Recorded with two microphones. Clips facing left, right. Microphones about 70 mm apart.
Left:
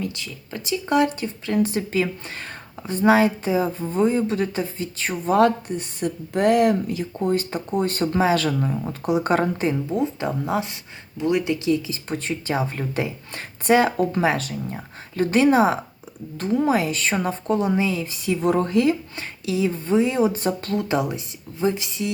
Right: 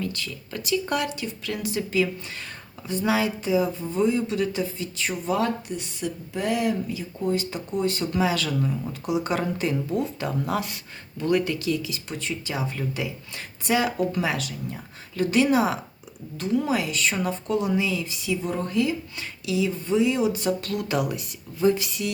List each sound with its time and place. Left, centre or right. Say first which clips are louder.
0.0 s speech: left 1 dB; centre; by 7.1 s left
7.2 s speech: left 3 dB; left
18.4 s speech: left 8 dB; left
19.1 s speech: left 2 dB; left